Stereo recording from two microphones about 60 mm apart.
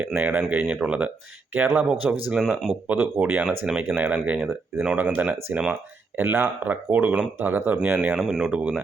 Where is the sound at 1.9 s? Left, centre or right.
Centre.